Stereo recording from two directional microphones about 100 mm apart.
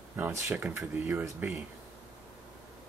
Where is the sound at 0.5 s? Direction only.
25° right (ahead or behind).